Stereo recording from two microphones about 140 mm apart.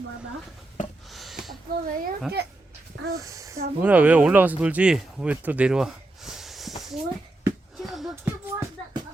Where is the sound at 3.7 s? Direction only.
10° right (ahead or behind).